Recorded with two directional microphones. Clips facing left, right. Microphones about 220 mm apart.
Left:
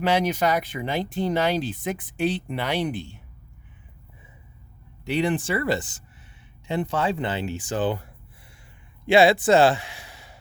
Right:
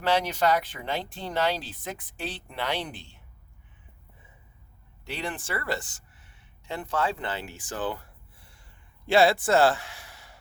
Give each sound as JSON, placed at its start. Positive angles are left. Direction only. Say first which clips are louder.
{"t": 0.0, "sound": "speech", "louder": "left 3 dB", "side_deg": 15}
{"t": 5.0, "sound": "speech", "louder": "left 11 dB", "side_deg": 15}
{"t": 9.0, "sound": "speech", "louder": "left 4 dB", "side_deg": 15}